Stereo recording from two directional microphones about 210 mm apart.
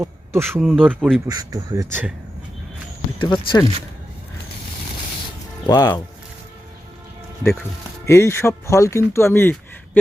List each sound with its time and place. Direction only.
0.0 s a sound: 10° right (ahead or behind)
0.6 s speech: centre (ahead or behind)
1.3 s speech: 20° right (ahead or behind)
3.2 s speech: 20° left (ahead or behind)
5.6 s speech: 20° left (ahead or behind)
8.0 s speech: 10° left (ahead or behind)